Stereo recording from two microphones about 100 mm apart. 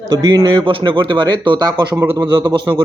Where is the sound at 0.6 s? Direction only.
60° right (ahead or behind).